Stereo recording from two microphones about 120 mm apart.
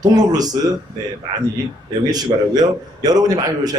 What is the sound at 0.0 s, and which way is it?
Speech, 35° right (ahead or behind).